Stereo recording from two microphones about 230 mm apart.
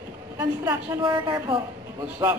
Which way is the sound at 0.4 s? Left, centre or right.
Centre.